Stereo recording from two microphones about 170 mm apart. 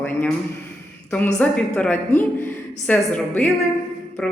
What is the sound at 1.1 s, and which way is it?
A woman's voice, 10° left (ahead or behind).